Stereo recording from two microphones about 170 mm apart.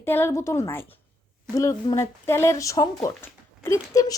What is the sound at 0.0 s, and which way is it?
Speech, 15° left (ahead or behind).